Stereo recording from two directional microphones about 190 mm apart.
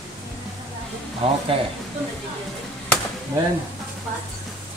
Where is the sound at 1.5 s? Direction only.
30° right (ahead or behind).